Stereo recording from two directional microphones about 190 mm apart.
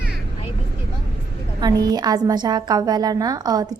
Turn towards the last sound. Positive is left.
turn(degrees=-20)  # may be behind; listen again after turning